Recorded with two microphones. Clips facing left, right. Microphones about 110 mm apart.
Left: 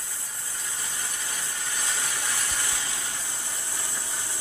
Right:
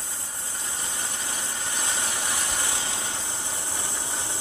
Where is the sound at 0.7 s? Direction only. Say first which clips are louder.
Right 2 dB; 25° right (ahead or behind).